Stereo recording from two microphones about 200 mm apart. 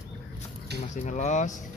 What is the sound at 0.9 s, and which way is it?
Speech, 35° left (ahead or behind).